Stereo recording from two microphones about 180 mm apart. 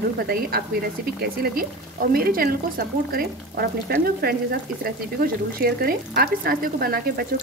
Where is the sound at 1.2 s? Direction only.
55° right (ahead or behind).